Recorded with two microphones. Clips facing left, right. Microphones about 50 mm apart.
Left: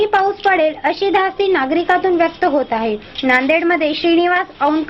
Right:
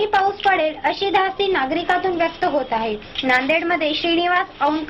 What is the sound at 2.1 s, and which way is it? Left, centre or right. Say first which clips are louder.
Speech: left 5 dB; left.